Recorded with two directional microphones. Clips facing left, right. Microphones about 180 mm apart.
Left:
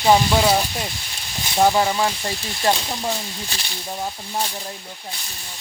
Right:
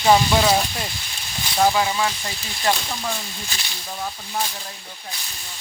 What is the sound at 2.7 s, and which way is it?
Speech, 20° left (ahead or behind).